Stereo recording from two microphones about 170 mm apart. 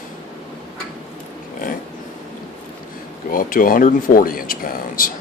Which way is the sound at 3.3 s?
55° left (ahead or behind).